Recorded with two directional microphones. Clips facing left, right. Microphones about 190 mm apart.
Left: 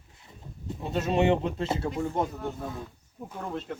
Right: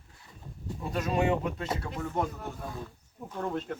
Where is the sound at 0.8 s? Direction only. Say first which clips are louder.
Left 3 dB; 25° left (ahead or behind).